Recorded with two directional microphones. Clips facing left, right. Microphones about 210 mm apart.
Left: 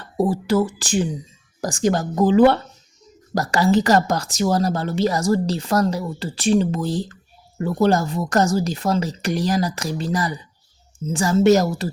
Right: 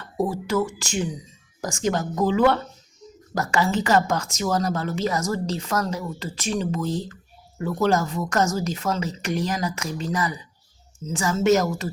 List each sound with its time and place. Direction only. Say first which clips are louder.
0.2 s a woman's voice: left 4 dB; 35° left (ahead or behind)